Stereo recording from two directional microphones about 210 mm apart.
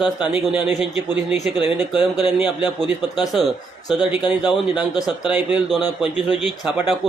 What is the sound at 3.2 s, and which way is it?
Speech, centre (ahead or behind).